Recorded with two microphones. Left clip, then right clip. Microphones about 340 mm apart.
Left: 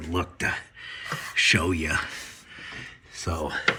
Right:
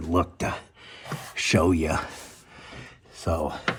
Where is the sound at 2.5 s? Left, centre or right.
Centre.